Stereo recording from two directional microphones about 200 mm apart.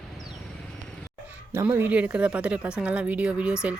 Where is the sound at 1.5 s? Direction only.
10° right (ahead or behind).